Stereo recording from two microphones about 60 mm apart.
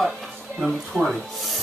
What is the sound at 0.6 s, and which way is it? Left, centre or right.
Speech, centre.